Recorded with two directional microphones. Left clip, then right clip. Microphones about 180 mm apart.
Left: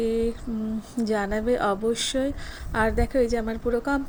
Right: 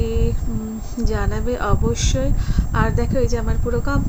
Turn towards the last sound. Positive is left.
turn(degrees=15)  # may be behind; listen again after turning